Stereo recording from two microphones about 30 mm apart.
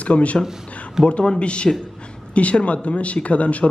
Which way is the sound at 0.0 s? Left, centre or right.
Left.